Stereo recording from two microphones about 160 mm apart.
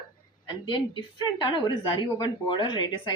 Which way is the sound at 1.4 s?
30° left (ahead or behind).